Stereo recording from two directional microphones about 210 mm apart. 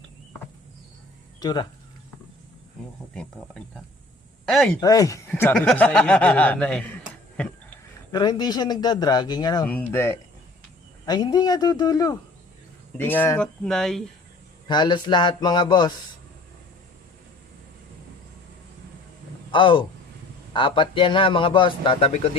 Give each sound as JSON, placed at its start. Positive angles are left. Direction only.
{"t": 1.4, "sound": "speech", "side_deg": 20}
{"t": 4.4, "sound": "speech", "side_deg": 5}
{"t": 4.8, "sound": "speech", "side_deg": 15}
{"t": 8.1, "sound": "a man's voice", "side_deg": 20}
{"t": 9.6, "sound": "speech", "side_deg": 10}
{"t": 14.7, "sound": "a man's voice", "side_deg": 20}
{"t": 19.5, "sound": "a man's voice", "side_deg": 25}